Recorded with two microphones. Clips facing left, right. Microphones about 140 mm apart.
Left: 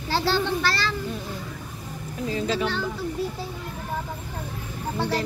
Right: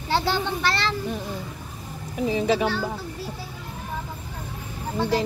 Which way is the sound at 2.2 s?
15° right (ahead or behind).